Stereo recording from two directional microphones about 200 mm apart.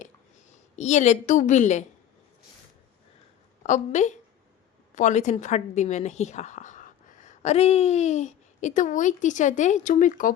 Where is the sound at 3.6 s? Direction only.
35° left (ahead or behind).